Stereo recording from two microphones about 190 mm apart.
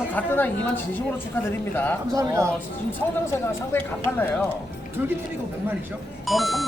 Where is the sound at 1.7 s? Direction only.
10° left (ahead or behind).